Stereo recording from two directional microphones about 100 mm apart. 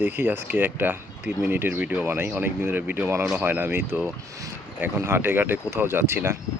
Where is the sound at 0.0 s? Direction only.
20° right (ahead or behind).